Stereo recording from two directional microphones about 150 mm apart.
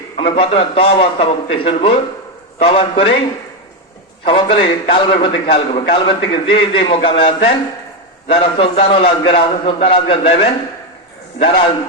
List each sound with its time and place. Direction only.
0.2 s a man's voice: 35° left (ahead or behind)
4.2 s a man's voice: 35° left (ahead or behind)